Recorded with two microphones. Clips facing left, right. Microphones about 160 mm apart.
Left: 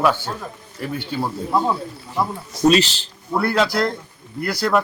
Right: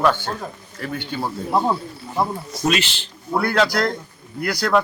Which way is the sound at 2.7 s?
40° left (ahead or behind).